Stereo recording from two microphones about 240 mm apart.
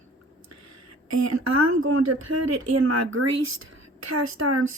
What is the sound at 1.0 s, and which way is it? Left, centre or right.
A woman's voice, right.